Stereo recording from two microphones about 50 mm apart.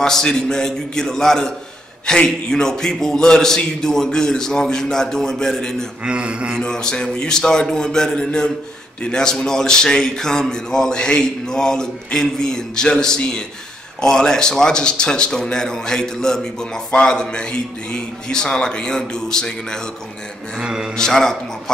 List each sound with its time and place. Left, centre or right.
0.0 s speech: centre
6.0 s a man's voice: right
6.6 s speech: centre
20.6 s a man's voice: centre
20.9 s speech: centre